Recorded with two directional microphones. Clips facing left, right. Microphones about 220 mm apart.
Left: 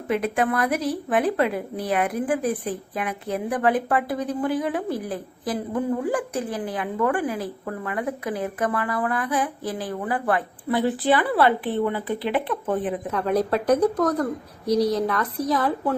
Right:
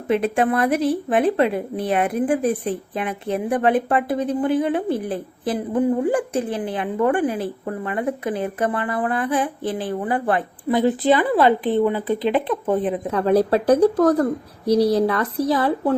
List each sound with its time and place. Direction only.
0.1 s a woman's voice: 30° right (ahead or behind)